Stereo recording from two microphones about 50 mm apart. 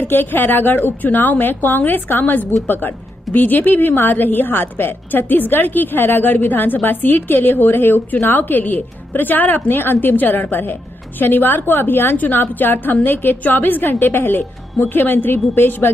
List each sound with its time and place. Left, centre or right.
0.0 s a woman's voice: left